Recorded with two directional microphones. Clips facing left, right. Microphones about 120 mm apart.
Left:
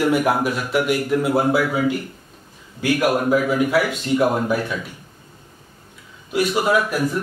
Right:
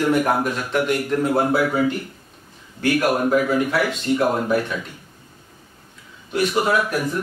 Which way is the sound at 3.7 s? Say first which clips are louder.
Left 1 dB; centre (ahead or behind).